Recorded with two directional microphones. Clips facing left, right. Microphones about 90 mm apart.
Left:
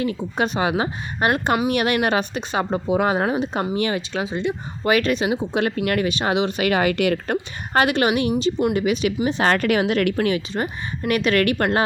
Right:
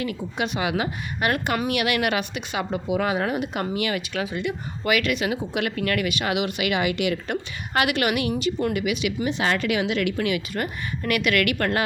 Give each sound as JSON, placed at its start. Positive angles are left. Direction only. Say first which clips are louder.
{"t": 0.0, "sound": "speech", "louder": "left 5 dB", "side_deg": 30}
{"t": 9.2, "sound": "speech", "louder": "left 5 dB", "side_deg": 45}
{"t": 10.5, "sound": "speech", "louder": "left 2 dB", "side_deg": 25}